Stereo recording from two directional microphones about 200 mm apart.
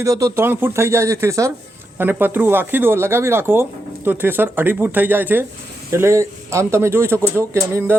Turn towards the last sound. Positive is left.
turn(degrees=-15)  # may be behind; listen again after turning